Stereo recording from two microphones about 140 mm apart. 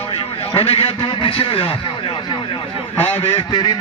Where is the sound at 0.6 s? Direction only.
45° left (ahead or behind).